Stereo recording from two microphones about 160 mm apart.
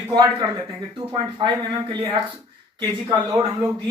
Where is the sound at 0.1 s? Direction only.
25° right (ahead or behind).